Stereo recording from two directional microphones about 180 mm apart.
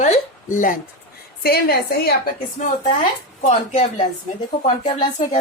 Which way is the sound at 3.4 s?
35° left (ahead or behind).